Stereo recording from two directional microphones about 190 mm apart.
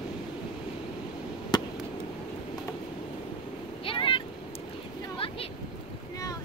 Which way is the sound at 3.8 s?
25° left (ahead or behind).